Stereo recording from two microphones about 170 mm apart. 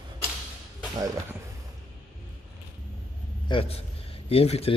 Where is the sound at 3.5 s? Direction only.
35° left (ahead or behind).